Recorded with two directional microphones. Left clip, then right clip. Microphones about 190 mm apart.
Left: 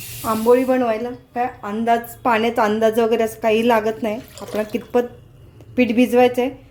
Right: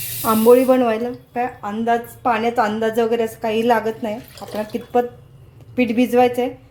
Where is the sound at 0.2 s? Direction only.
20° right (ahead or behind); by 1.7 s 5° right (ahead or behind).